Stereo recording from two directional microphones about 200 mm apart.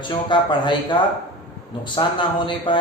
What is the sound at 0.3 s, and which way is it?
Speech, 20° left (ahead or behind).